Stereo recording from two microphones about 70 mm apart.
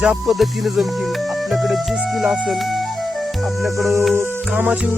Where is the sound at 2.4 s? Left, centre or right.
Centre.